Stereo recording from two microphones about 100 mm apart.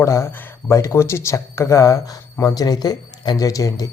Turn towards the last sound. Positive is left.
turn(degrees=35)  # may be behind; listen again after turning